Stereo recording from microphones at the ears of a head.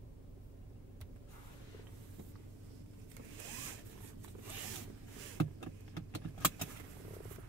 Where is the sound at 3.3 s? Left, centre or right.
Right.